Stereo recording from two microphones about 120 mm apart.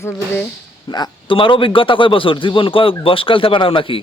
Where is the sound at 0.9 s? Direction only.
35° left (ahead or behind).